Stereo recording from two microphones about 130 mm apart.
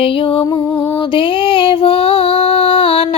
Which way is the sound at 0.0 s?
45° left (ahead or behind).